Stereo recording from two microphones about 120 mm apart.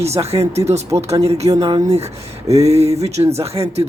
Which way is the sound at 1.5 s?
45° right (ahead or behind).